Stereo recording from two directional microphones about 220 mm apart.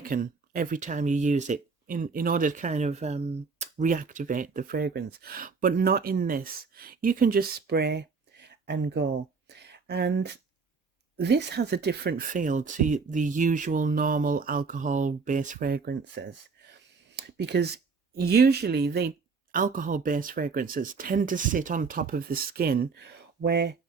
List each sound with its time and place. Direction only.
0.0 s speech: 40° right (ahead or behind)